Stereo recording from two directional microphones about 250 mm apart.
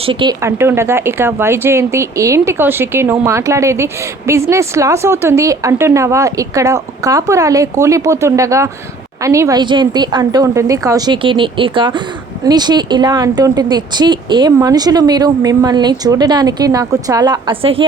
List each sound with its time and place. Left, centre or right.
0.0 s speech: centre